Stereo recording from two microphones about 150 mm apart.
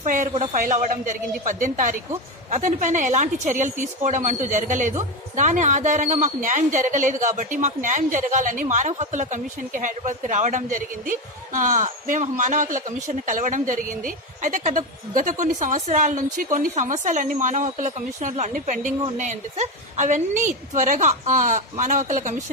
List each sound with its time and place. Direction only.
0.0 s a woman's voice: 60° right (ahead or behind)